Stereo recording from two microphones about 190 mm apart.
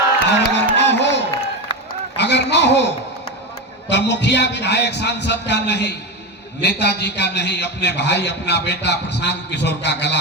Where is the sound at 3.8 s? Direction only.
65° left (ahead or behind).